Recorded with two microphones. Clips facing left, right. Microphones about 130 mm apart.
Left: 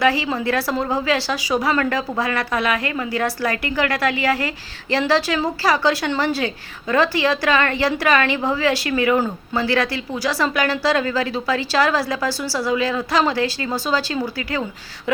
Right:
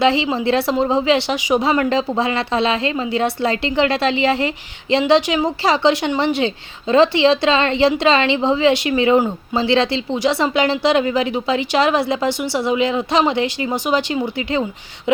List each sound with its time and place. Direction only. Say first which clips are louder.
0.0 s speech: right 3 dB; 25° right (ahead or behind)